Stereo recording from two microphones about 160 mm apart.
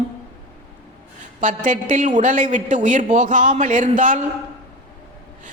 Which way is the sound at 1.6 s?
50° right (ahead or behind).